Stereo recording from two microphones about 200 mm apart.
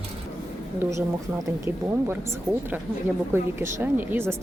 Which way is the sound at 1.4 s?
15° right (ahead or behind).